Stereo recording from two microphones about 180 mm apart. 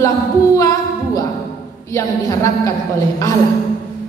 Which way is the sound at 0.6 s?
20° left (ahead or behind).